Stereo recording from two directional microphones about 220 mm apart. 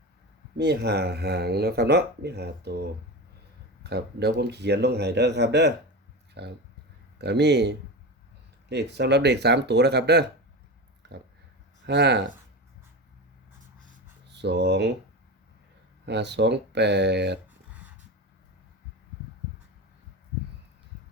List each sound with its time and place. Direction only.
0.5 s speech: 50° right (ahead or behind)
11.0 s a sound: 50° right (ahead or behind)
11.9 s speech: 50° right (ahead or behind)
14.3 s speech: 50° right (ahead or behind)
16.0 s speech: 50° right (ahead or behind)